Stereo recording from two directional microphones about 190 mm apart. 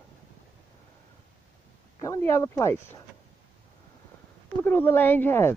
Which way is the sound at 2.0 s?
15° left (ahead or behind).